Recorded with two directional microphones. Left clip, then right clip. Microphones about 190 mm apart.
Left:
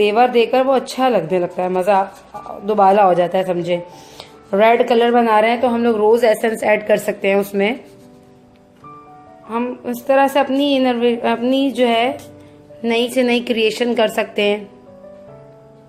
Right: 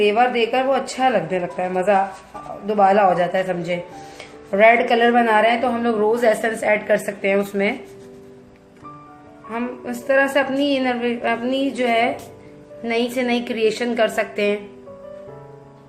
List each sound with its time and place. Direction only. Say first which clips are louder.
0.0 s speech: left 3 dB; 45° left (ahead or behind)
9.5 s speech: left 5 dB; 40° left (ahead or behind)